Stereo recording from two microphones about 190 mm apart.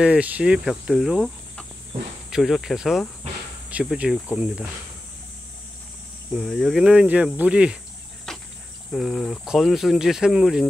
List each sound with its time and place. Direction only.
0.0 s speech: 5° right (ahead or behind)
6.3 s speech: centre (ahead or behind)
8.3 s cricket: centre (ahead or behind)
8.9 s speech: centre (ahead or behind)